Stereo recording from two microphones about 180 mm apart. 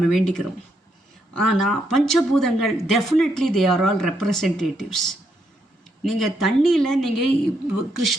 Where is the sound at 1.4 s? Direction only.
Centre (ahead or behind).